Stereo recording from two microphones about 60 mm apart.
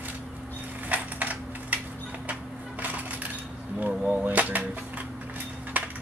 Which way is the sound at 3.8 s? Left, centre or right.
Right.